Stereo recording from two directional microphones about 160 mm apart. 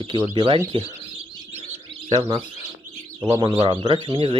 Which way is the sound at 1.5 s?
40° right (ahead or behind).